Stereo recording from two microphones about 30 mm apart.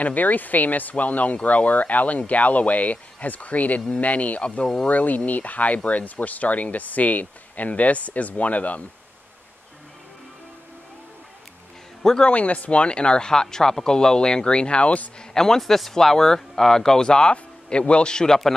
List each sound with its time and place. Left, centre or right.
0.0 s speech: left
4.4 s speech: left
4.8 s speech: left
12.3 s speech: left
12.8 s speech: left
15.3 s a man's voice: centre
17.3 s speech: left
18.0 s speech: left